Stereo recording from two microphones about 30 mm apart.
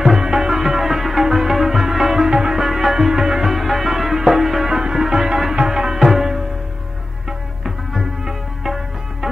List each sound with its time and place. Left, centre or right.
0.0 s music: centre
3.4 s music: centre
4.6 s music: right